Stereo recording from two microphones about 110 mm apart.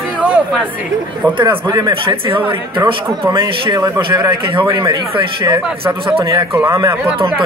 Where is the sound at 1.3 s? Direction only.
40° right (ahead or behind).